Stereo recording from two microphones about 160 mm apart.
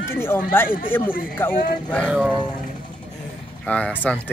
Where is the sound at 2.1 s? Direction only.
5° right (ahead or behind).